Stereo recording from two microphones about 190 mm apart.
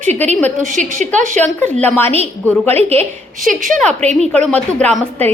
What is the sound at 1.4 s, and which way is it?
Speech, 10° left (ahead or behind).